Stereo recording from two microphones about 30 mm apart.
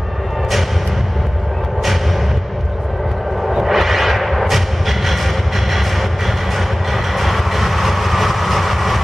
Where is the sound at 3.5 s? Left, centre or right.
Centre.